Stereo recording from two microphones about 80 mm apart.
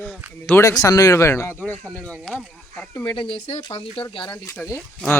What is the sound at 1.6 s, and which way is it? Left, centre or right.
Speech, centre.